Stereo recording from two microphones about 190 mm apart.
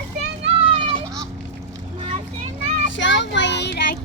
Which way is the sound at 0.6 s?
25° right (ahead or behind).